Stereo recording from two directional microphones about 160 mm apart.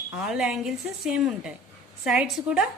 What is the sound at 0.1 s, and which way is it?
A woman's voice, 5° right (ahead or behind).